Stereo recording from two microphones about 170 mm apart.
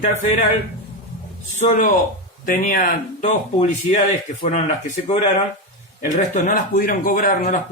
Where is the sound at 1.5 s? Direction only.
45° left (ahead or behind).